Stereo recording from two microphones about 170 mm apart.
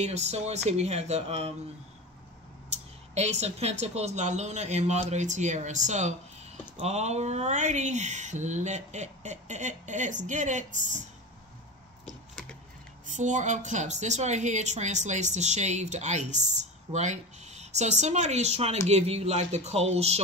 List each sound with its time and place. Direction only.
0.0 s speech: 40° right (ahead or behind)
2.7 s speech: 40° right (ahead or behind)
13.0 s speech: 45° right (ahead or behind)